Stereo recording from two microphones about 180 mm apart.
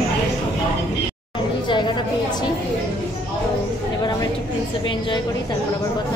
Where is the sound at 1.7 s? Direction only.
25° left (ahead or behind).